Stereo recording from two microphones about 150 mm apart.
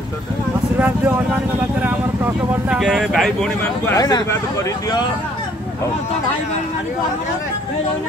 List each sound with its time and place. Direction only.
0.7 s speech: 10° right (ahead or behind)
3.9 s speech: 25° left (ahead or behind)